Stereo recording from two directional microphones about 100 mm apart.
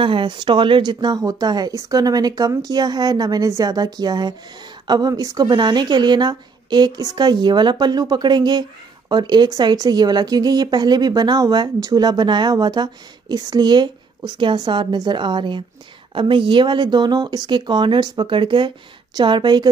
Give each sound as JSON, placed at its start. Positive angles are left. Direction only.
{"t": 0.0, "sound": "speech", "side_deg": -55}